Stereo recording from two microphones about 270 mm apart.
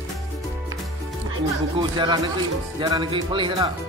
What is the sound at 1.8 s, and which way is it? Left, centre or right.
Speech, centre.